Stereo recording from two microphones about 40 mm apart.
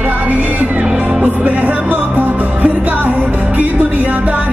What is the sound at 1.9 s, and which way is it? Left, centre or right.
Music, right.